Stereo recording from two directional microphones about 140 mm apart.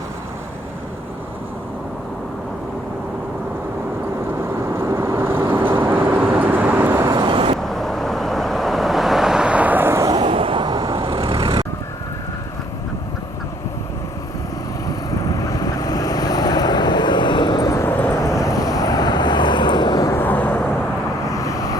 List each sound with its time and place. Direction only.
4.4 s vehicle: 20° right (ahead or behind)
7.1 s vehicle: 35° right (ahead or behind)
7.6 s vehicle: centre (ahead or behind); by 10.2 s 20° right (ahead or behind)
10.2 s vehicle: 40° right (ahead or behind)
14.8 s vehicle: 25° left (ahead or behind)
20.1 s vehicle: 10° left (ahead or behind)
21.2 s vehicle: 25° left (ahead or behind)